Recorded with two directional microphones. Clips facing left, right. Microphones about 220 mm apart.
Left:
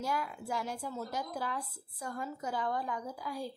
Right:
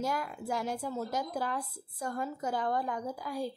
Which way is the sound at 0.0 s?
45° right (ahead or behind).